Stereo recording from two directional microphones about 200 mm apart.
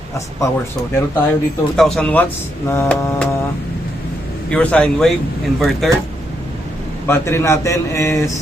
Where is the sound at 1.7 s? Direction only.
5° left (ahead or behind).